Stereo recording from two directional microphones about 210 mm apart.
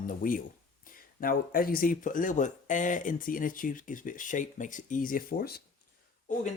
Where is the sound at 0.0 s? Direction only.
40° left (ahead or behind).